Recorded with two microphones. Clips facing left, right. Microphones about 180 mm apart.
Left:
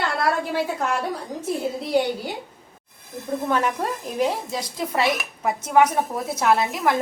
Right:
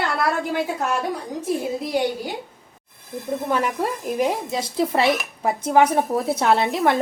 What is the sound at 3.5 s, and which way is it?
A woman's voice, 10° right (ahead or behind).